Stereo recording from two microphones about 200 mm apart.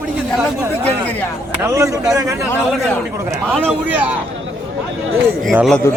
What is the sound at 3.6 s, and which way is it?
Speech, 5° right (ahead or behind).